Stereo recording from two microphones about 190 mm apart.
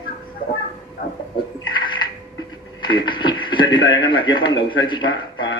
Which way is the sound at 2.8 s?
25° left (ahead or behind).